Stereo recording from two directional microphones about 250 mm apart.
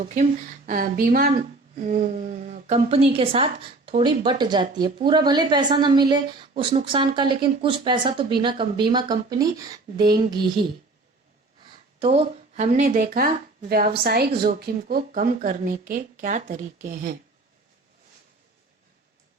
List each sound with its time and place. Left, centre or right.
0.0 s speech: right
11.6 s speech: right